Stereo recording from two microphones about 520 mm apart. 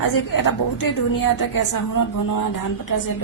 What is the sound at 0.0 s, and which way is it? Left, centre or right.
A woman's voice, left.